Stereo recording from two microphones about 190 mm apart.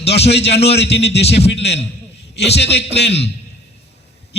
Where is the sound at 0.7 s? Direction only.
60° left (ahead or behind).